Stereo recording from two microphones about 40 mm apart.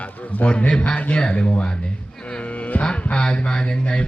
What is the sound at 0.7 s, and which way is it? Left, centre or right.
Speech, left.